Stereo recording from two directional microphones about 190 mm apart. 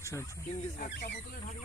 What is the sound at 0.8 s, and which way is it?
Speech, 50° left (ahead or behind).